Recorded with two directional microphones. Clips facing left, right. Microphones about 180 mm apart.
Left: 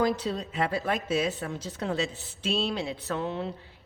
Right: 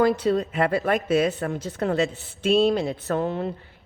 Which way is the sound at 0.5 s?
55° right (ahead or behind).